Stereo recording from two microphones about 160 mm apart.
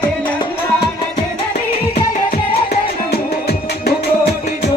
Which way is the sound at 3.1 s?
90° left.